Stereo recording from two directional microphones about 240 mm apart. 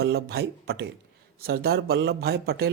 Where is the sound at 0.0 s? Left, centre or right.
Right.